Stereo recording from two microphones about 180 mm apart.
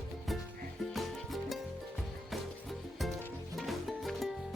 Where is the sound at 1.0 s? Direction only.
Centre (ahead or behind).